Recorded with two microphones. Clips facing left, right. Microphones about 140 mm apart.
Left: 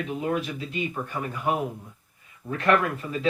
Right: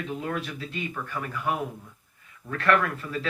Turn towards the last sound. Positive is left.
turn(degrees=20)  # may be behind; listen again after turning